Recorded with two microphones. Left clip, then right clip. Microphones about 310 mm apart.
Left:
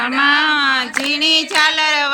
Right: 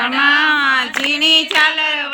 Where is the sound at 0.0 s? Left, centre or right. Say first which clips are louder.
Right 1 dB; centre.